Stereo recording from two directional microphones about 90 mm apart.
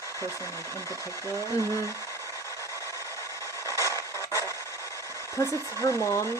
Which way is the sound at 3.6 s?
35° left (ahead or behind).